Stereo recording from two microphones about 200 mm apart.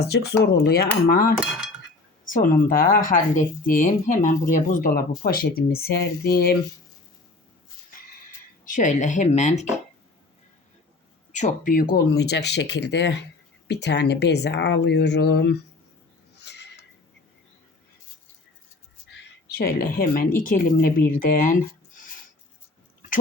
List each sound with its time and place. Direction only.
0.4 s a woman's voice: 55° left (ahead or behind)
8.7 s speech: 35° left (ahead or behind)
11.3 s speech: 35° left (ahead or behind); by 15.5 s 60° left (ahead or behind)
16.4 s a sound: 60° left (ahead or behind)
19.0 s a woman's voice: 55° left (ahead or behind)